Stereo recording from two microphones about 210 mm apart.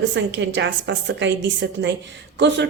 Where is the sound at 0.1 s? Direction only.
60° right (ahead or behind).